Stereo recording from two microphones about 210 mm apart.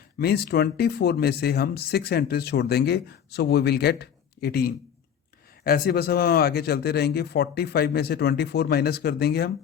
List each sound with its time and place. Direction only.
0.2 s speech: 50° left (ahead or behind)